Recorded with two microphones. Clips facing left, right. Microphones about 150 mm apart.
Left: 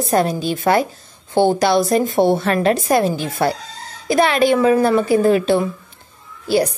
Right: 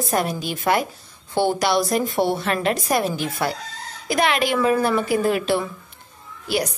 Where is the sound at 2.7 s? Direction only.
25° left (ahead or behind).